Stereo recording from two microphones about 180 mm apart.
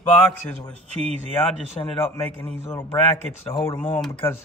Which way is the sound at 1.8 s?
25° left (ahead or behind).